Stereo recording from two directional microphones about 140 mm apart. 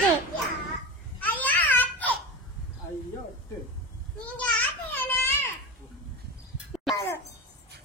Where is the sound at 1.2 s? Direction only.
10° left (ahead or behind).